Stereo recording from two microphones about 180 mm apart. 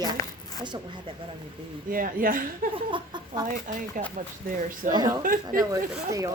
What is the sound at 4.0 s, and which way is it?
Speech, 45° right (ahead or behind).